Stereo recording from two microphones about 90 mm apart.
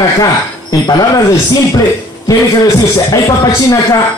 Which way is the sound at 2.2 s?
40° left (ahead or behind).